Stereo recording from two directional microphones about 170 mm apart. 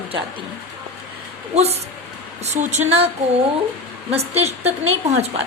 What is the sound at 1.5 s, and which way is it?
A woman's voice, 40° right (ahead or behind).